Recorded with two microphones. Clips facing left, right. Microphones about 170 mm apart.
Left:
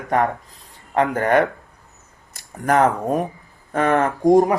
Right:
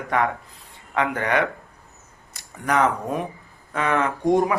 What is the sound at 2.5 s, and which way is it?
Speech, 45° left (ahead or behind).